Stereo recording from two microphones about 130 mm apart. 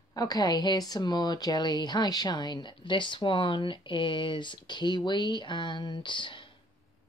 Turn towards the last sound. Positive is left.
turn(degrees=40)  # may be behind; listen again after turning